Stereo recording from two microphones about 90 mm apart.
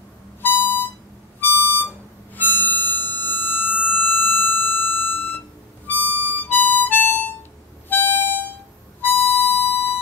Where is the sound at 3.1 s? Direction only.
20° left (ahead or behind).